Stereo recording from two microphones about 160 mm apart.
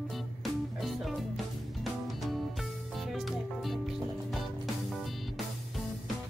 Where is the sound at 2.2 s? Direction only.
Centre (ahead or behind).